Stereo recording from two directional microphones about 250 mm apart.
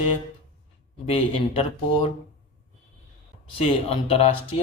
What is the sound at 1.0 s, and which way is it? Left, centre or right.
Speech, left.